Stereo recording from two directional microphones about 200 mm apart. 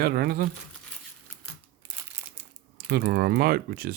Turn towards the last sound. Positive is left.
turn(degrees=-50)  # may be behind; listen again after turning